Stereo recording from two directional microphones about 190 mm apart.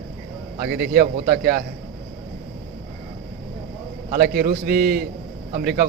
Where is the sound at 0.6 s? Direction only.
55° right (ahead or behind).